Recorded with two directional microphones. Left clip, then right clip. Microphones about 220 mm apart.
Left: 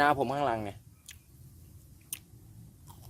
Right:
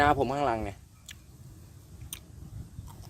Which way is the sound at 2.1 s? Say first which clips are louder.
Right 1 dB; 20° left (ahead or behind).